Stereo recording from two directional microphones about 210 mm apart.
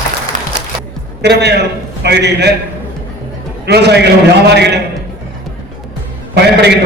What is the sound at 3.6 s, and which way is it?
A man's voice, 55° right (ahead or behind).